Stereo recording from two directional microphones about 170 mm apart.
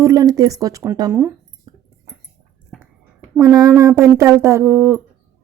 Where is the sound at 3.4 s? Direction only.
20° right (ahead or behind).